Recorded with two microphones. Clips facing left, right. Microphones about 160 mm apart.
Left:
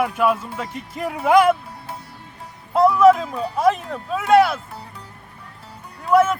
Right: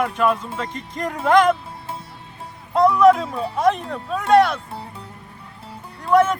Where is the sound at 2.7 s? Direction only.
5° left (ahead or behind).